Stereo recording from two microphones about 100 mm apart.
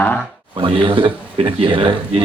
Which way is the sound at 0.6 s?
60° right (ahead or behind).